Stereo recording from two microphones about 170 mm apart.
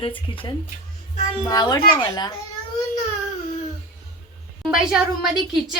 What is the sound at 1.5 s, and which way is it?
Speech, 25° left (ahead or behind).